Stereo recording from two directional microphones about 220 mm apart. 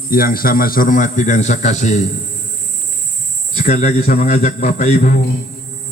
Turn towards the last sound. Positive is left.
turn(degrees=35)  # may be behind; listen again after turning